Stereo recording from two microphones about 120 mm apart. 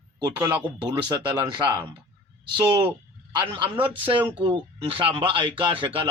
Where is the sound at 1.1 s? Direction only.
30° right (ahead or behind).